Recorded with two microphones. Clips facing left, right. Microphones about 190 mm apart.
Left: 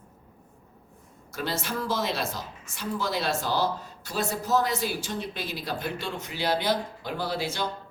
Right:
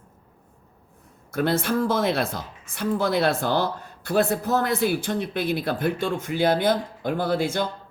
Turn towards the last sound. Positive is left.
turn(degrees=-50)  # may be behind; listen again after turning